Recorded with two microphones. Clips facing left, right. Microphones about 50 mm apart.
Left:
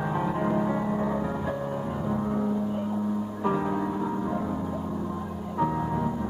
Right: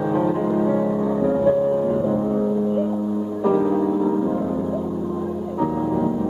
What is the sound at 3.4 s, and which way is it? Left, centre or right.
Music, centre.